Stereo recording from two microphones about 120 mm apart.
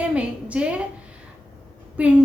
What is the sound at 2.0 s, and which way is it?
Speech, 10° right (ahead or behind).